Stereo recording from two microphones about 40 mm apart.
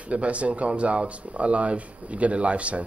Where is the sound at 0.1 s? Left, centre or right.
Right.